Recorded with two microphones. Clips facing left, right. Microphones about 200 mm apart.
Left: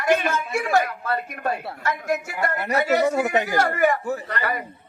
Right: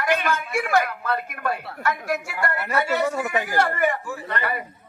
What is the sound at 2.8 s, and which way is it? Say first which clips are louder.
Speech: left 3 dB; 40° left (ahead or behind).